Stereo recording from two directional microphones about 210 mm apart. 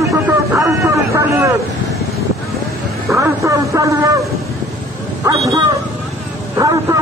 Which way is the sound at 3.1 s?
15° right (ahead or behind).